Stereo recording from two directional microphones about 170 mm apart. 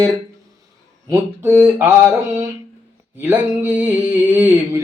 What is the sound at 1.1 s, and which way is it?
Mantra, 15° right (ahead or behind).